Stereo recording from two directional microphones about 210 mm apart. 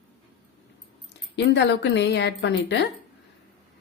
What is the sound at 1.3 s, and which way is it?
Speech, 55° left (ahead or behind).